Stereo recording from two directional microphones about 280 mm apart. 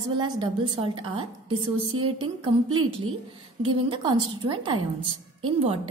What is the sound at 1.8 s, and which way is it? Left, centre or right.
Speech, right.